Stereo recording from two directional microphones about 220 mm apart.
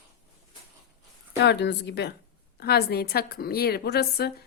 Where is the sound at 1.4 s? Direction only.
50° left (ahead or behind).